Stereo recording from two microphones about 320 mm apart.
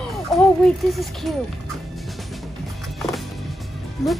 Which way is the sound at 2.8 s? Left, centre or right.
Centre.